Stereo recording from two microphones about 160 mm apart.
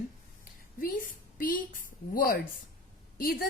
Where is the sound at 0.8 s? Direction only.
60° left (ahead or behind).